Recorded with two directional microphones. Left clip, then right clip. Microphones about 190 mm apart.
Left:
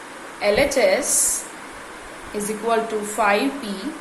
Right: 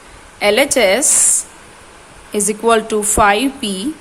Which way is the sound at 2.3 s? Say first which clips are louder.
Right 8 dB; 45° right (ahead or behind).